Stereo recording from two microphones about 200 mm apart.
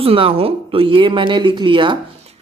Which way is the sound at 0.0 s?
30° right (ahead or behind).